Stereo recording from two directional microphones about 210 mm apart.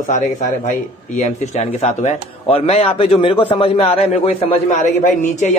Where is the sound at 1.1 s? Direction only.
30° left (ahead or behind).